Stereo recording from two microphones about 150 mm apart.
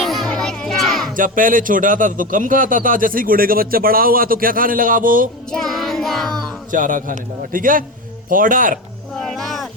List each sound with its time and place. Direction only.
0.0 s music: centre (ahead or behind)
1.1 s a man's voice: 65° right (ahead or behind)
5.5 s music: centre (ahead or behind)
6.7 s a man's voice: 60° right (ahead or behind)
9.1 s cat: centre (ahead or behind)